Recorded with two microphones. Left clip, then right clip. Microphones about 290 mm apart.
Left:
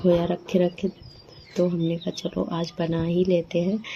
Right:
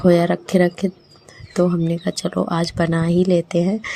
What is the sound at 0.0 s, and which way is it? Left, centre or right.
Speech, right.